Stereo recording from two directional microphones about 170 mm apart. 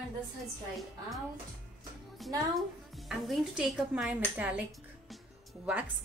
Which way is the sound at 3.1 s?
5° right (ahead or behind).